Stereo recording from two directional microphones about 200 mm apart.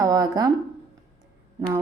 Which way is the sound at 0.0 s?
20° right (ahead or behind).